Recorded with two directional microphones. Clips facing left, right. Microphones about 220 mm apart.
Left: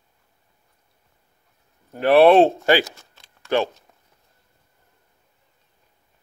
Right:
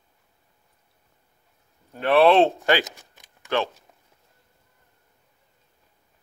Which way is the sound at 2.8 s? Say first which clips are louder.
Left 4 dB; 15° right (ahead or behind).